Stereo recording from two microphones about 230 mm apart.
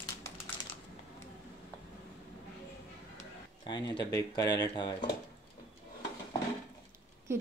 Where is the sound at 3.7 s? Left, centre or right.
Centre.